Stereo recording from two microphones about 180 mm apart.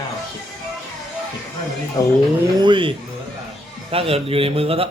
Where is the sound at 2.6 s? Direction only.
25° right (ahead or behind).